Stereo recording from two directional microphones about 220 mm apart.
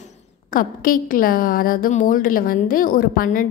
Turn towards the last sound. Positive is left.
turn(degrees=40)  # may be behind; listen again after turning